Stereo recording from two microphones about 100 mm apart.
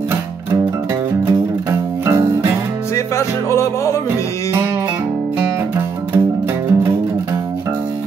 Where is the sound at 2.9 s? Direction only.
30° left (ahead or behind).